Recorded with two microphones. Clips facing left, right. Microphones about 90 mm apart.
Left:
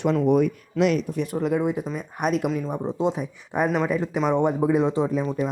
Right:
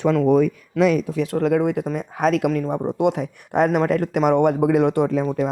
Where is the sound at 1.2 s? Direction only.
90° right.